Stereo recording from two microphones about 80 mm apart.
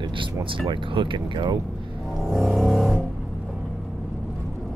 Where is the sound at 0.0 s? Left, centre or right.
Right.